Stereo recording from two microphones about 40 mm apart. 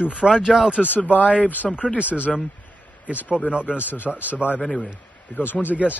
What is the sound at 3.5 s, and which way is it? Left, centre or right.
Speech, right.